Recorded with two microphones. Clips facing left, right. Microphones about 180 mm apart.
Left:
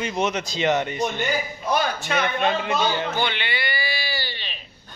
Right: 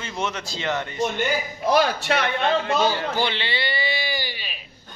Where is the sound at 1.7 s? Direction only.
75° right (ahead or behind).